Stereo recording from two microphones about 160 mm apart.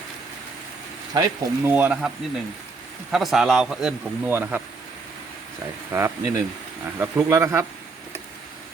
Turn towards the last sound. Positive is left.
turn(degrees=-15)  # may be behind; listen again after turning